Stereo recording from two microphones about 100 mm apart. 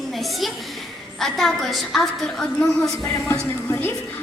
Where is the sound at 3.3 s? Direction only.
25° left (ahead or behind).